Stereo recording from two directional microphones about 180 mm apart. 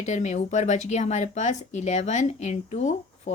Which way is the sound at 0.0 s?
40° left (ahead or behind).